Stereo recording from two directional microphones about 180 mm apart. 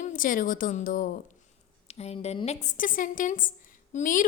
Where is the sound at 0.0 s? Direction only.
50° left (ahead or behind).